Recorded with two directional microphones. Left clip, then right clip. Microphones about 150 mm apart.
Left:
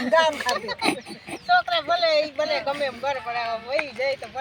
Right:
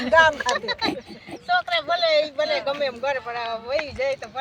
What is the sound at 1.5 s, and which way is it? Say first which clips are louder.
Speech: left 1 dB; 40° right (ahead or behind).